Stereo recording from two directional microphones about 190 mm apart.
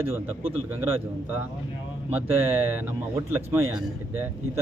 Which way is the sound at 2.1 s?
10° right (ahead or behind).